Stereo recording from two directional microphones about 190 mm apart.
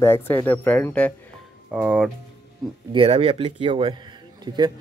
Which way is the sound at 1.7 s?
5° right (ahead or behind).